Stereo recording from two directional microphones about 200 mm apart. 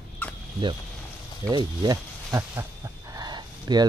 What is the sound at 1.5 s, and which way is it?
Wild animals, 20° right (ahead or behind).